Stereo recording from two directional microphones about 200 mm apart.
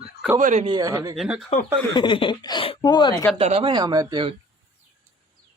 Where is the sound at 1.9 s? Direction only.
25° left (ahead or behind).